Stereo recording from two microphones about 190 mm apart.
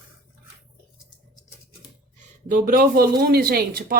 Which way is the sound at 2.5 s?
50° right (ahead or behind).